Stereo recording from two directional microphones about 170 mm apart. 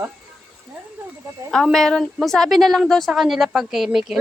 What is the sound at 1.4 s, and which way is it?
A woman's voice, centre (ahead or behind).